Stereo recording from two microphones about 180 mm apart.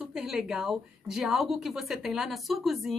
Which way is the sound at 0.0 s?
5° right (ahead or behind).